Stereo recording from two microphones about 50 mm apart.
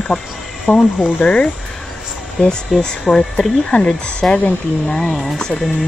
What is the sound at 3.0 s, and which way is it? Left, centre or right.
Speech, centre.